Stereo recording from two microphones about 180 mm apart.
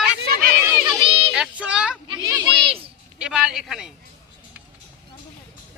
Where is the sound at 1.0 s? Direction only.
30° right (ahead or behind).